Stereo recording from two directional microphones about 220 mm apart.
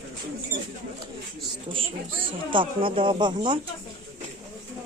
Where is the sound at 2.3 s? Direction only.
25° right (ahead or behind).